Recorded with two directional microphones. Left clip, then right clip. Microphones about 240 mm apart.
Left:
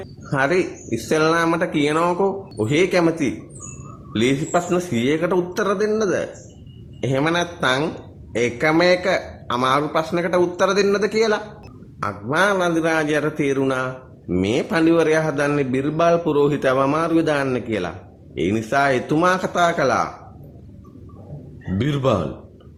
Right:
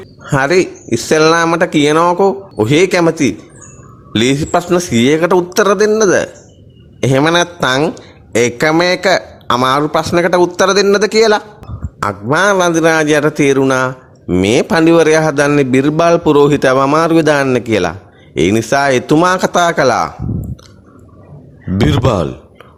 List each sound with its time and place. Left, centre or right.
0.3 s a man's voice: right
21.8 s a man's voice: right